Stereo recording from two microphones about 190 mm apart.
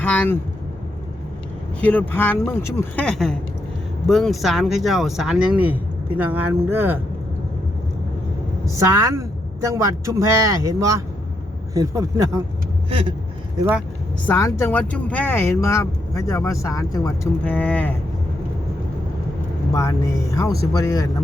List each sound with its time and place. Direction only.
0.0 s speech: 10° left (ahead or behind)
1.8 s speech: 10° left (ahead or behind); by 7.0 s 10° right (ahead or behind)
8.6 s a man's voice: 15° right (ahead or behind)
12.9 s vehicle: 30° right (ahead or behind)
14.3 s speech: 15° left (ahead or behind)
17.4 s speech: 5° left (ahead or behind)
19.7 s speech: 15° left (ahead or behind)